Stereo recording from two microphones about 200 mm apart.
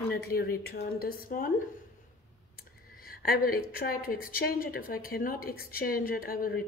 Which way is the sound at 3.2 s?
45° left (ahead or behind).